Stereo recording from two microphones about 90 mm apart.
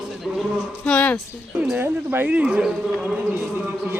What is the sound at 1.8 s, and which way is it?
A man's voice, 20° right (ahead or behind).